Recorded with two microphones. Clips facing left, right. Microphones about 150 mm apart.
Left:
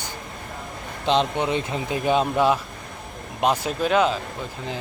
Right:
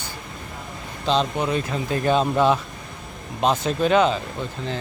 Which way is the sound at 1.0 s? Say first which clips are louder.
Even; 20° left (ahead or behind).